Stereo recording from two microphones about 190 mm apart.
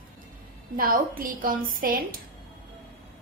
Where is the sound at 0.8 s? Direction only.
50° right (ahead or behind).